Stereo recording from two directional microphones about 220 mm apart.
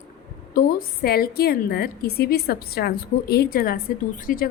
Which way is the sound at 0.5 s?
45° left (ahead or behind).